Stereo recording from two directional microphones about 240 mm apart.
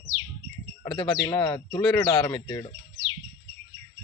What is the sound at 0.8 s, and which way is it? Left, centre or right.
Speech, centre.